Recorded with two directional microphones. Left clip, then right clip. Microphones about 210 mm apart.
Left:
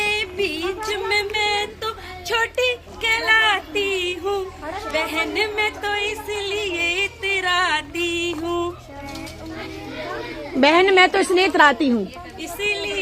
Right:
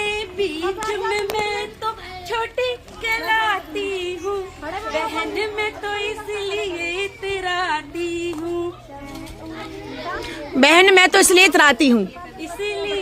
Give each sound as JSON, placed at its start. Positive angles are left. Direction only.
{"t": 0.0, "sound": "a sound", "side_deg": 15}
{"t": 4.9, "sound": "speech", "side_deg": 10}
{"t": 10.6, "sound": "a woman's voice", "side_deg": -25}